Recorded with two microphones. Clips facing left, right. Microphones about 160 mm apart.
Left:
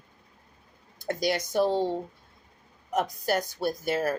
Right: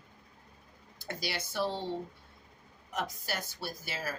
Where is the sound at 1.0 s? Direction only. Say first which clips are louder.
Left 11 dB; 50° left (ahead or behind).